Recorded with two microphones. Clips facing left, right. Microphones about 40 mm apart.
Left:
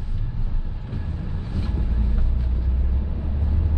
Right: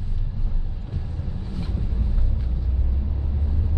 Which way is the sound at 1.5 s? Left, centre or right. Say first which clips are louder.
Left 2 dB; centre.